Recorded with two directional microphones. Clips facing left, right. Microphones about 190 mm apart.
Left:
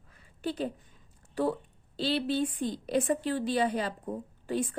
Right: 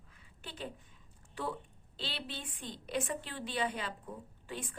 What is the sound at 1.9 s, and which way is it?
A woman's voice, 40° left (ahead or behind).